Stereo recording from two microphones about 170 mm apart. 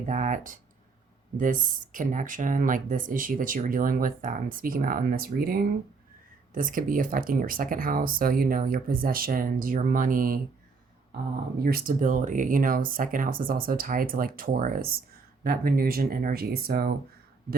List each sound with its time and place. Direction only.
0.0 s speech: 50° right (ahead or behind)
11.6 s speech: 55° right (ahead or behind)